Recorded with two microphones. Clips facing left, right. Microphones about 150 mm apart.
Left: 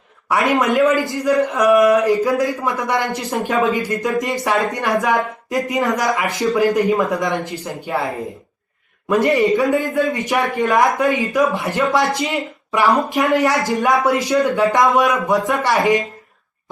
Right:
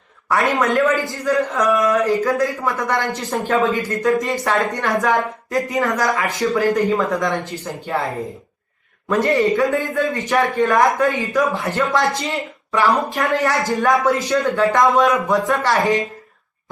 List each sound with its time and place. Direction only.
0.3 s a man's voice: 15° left (ahead or behind)